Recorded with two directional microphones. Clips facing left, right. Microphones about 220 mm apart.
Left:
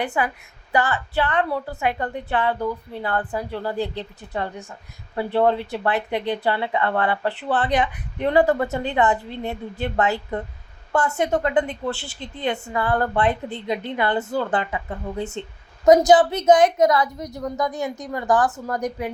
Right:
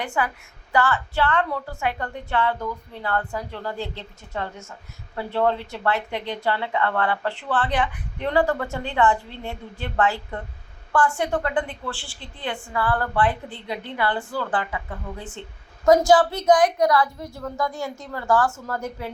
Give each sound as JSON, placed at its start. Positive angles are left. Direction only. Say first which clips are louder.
{"t": 0.2, "sound": "a woman's voice", "louder": "left 2 dB", "side_deg": 15}
{"t": 1.5, "sound": "a woman's voice", "louder": "left 3 dB", "side_deg": 35}
{"t": 1.8, "sound": "a woman's voice", "louder": "left 3 dB", "side_deg": 20}